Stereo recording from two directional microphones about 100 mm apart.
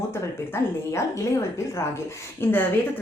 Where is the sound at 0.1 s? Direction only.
25° left (ahead or behind).